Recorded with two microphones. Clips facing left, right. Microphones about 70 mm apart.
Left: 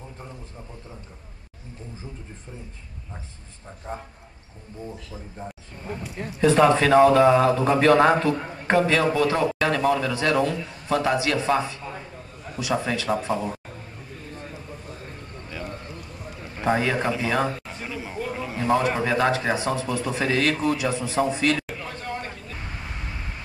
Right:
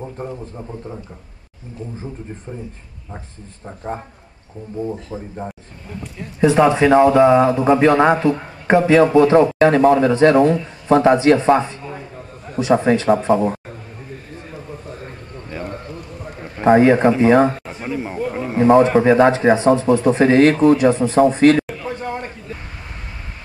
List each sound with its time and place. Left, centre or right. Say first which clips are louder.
0.0 s a man's voice: right 12 dB; right
3.6 s speech: right 7 dB; right
6.4 s a man's voice: right 4 dB; centre; by 13.6 s right
15.5 s a sound: right 6 dB; right
16.6 s speech: right 11 dB; right
21.8 s a sound: right 7 dB; right